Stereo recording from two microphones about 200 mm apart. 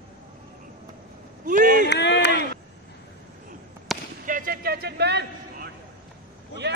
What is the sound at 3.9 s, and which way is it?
Basketball bounce, centre (ahead or behind).